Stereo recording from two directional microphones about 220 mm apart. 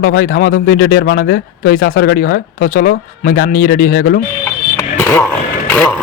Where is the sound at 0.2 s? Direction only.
40° left (ahead or behind).